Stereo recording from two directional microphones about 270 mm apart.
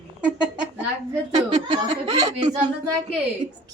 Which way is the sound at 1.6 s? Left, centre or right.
Centre.